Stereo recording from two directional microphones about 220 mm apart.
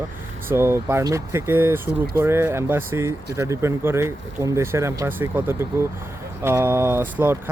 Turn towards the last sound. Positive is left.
turn(degrees=-10)  # may be behind; listen again after turning